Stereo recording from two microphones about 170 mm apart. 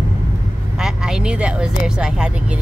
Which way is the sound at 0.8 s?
5° right (ahead or behind).